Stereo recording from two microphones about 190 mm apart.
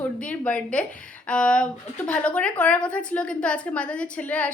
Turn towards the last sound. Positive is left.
turn(degrees=10)  # may be behind; listen again after turning